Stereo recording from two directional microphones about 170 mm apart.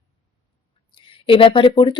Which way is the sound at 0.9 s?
30° left (ahead or behind).